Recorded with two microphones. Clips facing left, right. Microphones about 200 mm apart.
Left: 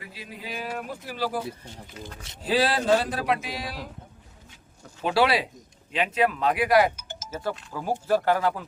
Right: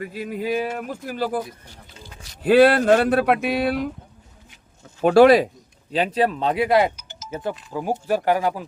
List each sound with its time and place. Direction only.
0.0 s speech: 50° right (ahead or behind)
1.5 s speech: 20° left (ahead or behind)
2.4 s a sound: 60° right (ahead or behind)
4.9 s speech: 50° right (ahead or behind)
5.9 s speech: 35° right (ahead or behind)
6.9 s music: 50° left (ahead or behind)
7.7 s speech: 15° right (ahead or behind)